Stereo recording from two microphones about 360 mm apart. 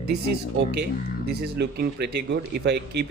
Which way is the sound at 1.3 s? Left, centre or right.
Right.